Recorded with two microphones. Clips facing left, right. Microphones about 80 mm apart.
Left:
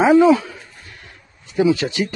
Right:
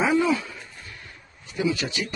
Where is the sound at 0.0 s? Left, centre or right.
Left.